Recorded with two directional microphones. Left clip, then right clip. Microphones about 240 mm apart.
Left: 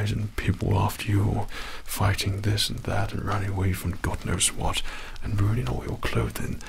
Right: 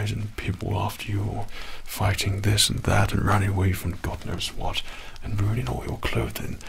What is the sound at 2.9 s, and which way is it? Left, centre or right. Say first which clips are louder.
Speech: right 6 dB; right.